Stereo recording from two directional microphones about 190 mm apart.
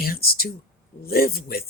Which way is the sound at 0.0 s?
50° left (ahead or behind).